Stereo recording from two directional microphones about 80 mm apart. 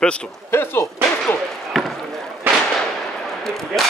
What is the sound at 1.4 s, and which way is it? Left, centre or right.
Basketball bounce, centre.